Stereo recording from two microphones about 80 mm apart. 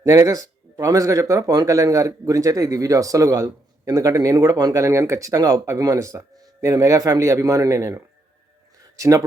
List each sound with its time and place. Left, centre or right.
0.0 s a man's voice: right